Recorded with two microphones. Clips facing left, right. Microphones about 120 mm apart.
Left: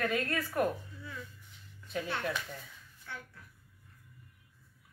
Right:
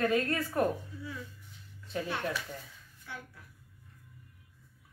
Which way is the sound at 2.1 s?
10° right (ahead or behind).